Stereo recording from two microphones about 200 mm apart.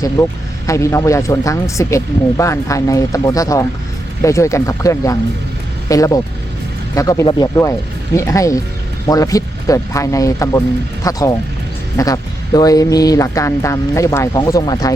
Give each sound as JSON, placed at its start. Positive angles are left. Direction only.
{"t": 0.2, "sound": "speech", "side_deg": 15}